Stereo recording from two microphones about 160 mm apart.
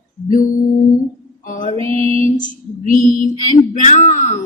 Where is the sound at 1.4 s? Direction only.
55° left (ahead or behind).